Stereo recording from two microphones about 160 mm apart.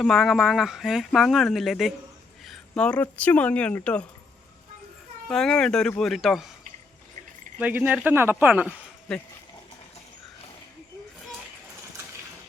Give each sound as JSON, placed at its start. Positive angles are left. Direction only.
{"t": 0.0, "sound": "speech", "side_deg": 0}
{"t": 5.3, "sound": "speech", "side_deg": 5}
{"t": 7.6, "sound": "speech", "side_deg": -10}